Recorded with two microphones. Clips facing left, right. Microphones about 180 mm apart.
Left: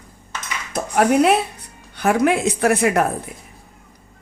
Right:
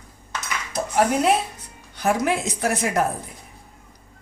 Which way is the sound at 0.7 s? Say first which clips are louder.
Left 4 dB; 60° left (ahead or behind).